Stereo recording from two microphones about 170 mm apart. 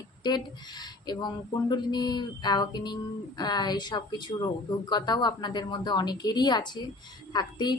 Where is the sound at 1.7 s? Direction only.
25° left (ahead or behind).